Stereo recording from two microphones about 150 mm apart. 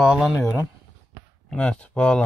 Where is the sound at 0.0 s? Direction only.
Centre (ahead or behind).